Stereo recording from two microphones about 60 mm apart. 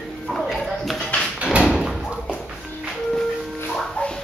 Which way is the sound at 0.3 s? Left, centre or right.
Centre.